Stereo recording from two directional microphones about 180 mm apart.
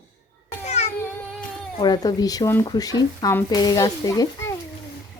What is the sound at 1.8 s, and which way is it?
A child's voice, 20° left (ahead or behind).